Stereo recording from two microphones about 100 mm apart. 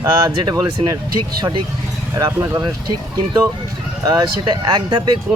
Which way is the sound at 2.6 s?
45° right (ahead or behind).